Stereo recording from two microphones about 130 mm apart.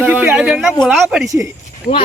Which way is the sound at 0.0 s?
10° right (ahead or behind).